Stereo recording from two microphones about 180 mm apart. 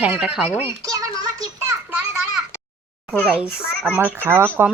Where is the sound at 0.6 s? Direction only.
20° right (ahead or behind).